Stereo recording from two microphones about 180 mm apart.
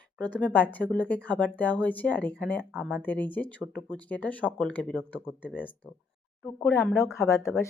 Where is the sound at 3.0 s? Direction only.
10° left (ahead or behind).